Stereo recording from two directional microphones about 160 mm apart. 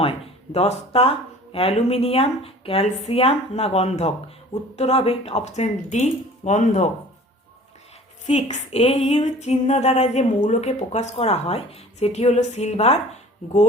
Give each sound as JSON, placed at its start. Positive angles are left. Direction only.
{"t": 0.0, "sound": "speech", "side_deg": 40}
{"t": 4.8, "sound": "female singing", "side_deg": 40}
{"t": 8.3, "sound": "female singing", "side_deg": 45}